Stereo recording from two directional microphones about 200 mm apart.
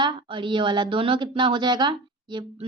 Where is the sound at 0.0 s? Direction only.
25° right (ahead or behind).